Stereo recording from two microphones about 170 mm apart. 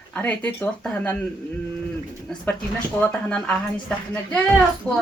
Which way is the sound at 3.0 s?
5° left (ahead or behind).